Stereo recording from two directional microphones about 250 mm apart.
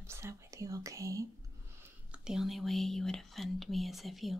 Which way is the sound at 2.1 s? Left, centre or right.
Centre.